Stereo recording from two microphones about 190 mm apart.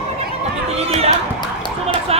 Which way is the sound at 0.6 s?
35° right (ahead or behind).